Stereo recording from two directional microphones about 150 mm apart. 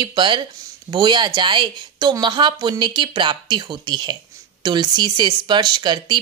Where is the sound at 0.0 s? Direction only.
30° right (ahead or behind).